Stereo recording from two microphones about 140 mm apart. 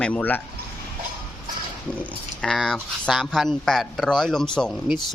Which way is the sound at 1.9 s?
5° left (ahead or behind).